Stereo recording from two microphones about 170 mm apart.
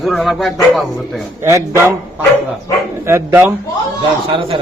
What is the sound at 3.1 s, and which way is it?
Speech, 15° right (ahead or behind).